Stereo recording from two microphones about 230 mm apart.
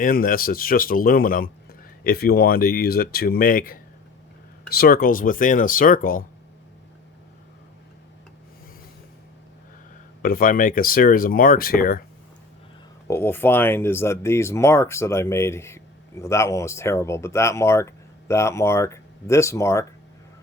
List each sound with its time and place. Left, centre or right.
0.0 s speech: left
10.2 s speech: left
13.1 s speech: centre